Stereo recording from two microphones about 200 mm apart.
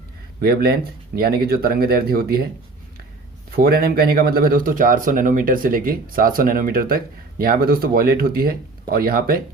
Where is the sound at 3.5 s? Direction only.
50° right (ahead or behind).